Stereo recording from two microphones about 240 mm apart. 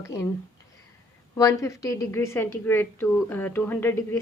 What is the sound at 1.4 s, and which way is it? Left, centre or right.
A woman's voice, centre.